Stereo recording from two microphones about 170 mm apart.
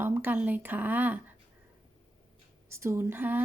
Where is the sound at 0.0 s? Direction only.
10° right (ahead or behind).